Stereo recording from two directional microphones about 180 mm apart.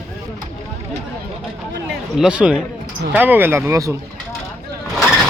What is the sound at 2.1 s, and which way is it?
Speech, 5° right (ahead or behind).